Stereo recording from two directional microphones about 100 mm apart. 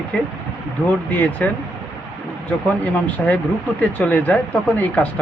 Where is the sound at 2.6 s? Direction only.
15° left (ahead or behind).